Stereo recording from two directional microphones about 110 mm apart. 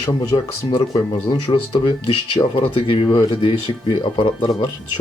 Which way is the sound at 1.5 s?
50° left (ahead or behind).